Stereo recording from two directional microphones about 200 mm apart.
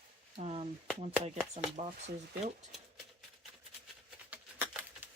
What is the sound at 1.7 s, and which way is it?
Speech, 35° right (ahead or behind).